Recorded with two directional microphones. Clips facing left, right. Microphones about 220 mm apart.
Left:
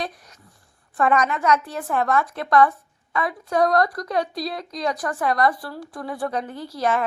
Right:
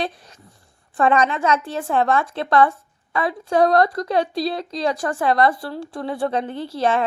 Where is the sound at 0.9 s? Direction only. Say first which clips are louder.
Right 2 dB; 30° right (ahead or behind).